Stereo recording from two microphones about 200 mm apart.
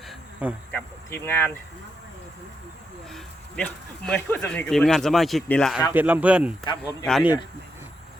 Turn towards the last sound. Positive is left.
turn(degrees=0)  # may be behind; listen again after turning